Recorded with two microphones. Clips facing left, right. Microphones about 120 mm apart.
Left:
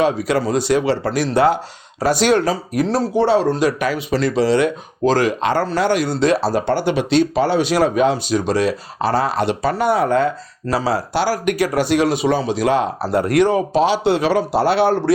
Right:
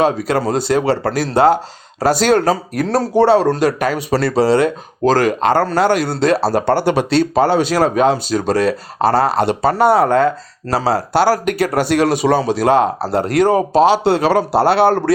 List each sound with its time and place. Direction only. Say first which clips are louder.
0.3 s speech: right 1 dB; 40° right (ahead or behind)
11.7 s speech: right 3 dB; 55° right (ahead or behind)